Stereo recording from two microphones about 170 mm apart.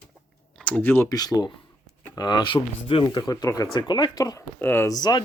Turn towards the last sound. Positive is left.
turn(degrees=25)  # may be behind; listen again after turning